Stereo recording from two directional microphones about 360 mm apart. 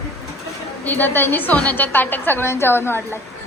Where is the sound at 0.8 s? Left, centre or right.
Centre.